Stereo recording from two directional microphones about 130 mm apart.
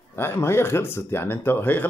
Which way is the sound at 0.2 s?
20° left (ahead or behind).